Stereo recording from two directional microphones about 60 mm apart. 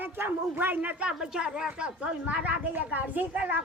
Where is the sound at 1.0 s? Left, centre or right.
Centre.